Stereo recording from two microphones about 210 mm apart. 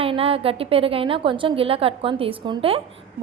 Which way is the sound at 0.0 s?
25° right (ahead or behind).